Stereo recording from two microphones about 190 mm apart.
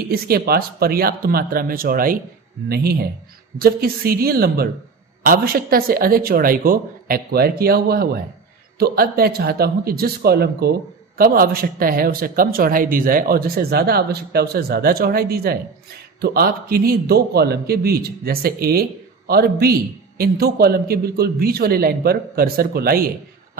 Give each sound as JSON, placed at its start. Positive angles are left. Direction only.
{"t": 0.1, "sound": "a man's voice", "side_deg": -50}